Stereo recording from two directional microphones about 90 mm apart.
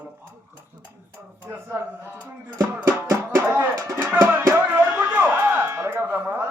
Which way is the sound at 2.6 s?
30° right (ahead or behind).